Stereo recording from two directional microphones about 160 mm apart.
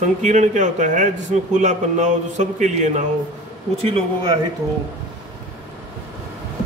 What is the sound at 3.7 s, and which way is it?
Speech, 35° right (ahead or behind).